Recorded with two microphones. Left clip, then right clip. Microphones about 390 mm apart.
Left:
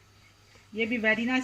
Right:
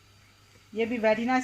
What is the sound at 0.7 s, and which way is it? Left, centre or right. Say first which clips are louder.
Speech: right 1 dB; right.